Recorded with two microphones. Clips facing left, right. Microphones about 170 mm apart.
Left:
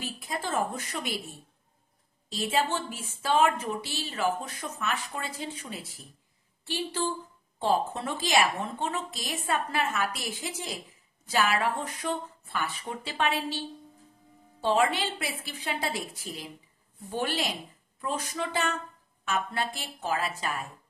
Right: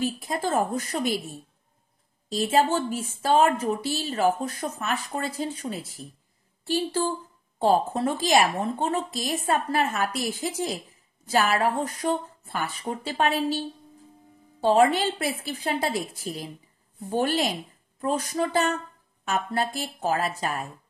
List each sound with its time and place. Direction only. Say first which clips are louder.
0.0 s a woman's voice: right 7 dB; 40° right (ahead or behind)
2.3 s a woman's voice: right 6 dB; 40° right (ahead or behind)
14.6 s a woman's voice: right 6 dB; 40° right (ahead or behind)